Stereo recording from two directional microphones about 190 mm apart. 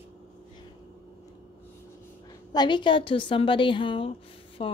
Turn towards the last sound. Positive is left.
turn(degrees=30)  # may be behind; listen again after turning